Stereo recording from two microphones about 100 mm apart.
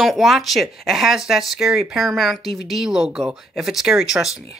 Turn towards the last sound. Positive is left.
turn(degrees=-5)  # may be behind; listen again after turning